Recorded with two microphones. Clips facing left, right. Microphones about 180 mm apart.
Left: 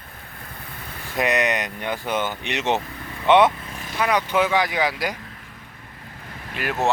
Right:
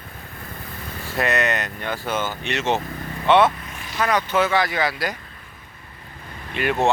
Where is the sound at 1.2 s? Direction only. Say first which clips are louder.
Left 1 dB; 15° left (ahead or behind).